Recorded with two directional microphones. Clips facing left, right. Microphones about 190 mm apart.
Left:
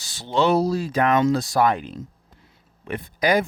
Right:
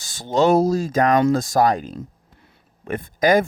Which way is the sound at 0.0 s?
50° right (ahead or behind).